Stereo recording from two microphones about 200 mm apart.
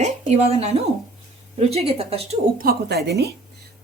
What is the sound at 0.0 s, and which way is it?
A woman's voice, 30° right (ahead or behind).